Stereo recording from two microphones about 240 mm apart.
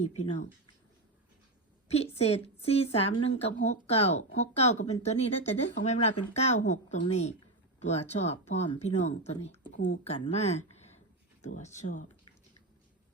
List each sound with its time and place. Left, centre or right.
0.0 s speech: left
2.1 s speech: left